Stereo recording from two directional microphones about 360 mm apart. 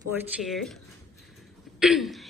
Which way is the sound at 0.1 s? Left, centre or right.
Centre.